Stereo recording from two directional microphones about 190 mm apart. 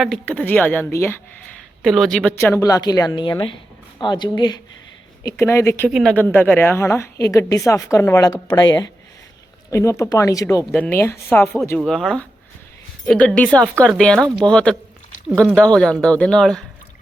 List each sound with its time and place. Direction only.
0.0 s a woman's voice: 5° left (ahead or behind)
1.8 s a woman's voice: centre (ahead or behind)
5.9 s a woman's voice: centre (ahead or behind)
11.8 s speech: centre (ahead or behind)